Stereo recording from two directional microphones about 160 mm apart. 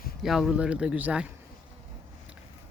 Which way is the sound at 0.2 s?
Centre (ahead or behind).